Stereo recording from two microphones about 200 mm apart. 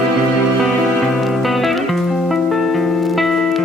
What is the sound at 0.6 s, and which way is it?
Music, centre (ahead or behind).